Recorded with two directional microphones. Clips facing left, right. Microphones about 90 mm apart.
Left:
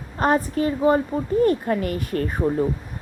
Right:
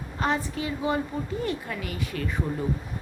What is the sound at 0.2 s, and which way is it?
A woman's voice, 45° left (ahead or behind).